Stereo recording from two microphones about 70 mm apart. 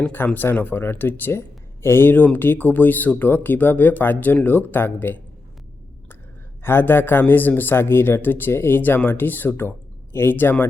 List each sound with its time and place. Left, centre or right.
0.3 s speech: left
6.6 s speech: left